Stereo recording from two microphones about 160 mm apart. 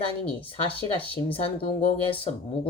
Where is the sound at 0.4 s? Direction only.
35° left (ahead or behind).